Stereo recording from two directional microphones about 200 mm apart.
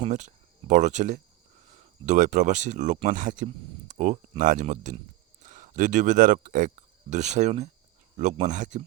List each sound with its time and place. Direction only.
0.0 s speech: 35° right (ahead or behind)